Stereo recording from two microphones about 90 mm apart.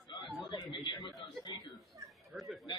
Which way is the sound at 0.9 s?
50° left (ahead or behind).